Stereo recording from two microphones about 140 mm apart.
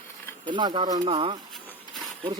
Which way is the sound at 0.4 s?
35° right (ahead or behind).